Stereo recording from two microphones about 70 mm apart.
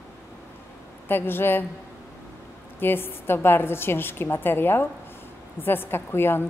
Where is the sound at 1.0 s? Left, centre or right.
Left.